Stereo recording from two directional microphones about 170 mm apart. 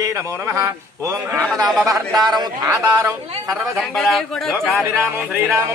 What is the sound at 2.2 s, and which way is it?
Speech, 25° right (ahead or behind).